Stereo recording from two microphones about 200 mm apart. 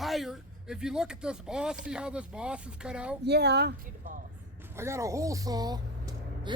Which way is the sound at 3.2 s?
55° right (ahead or behind).